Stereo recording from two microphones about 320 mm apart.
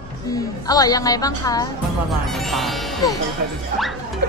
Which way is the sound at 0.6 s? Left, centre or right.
Centre.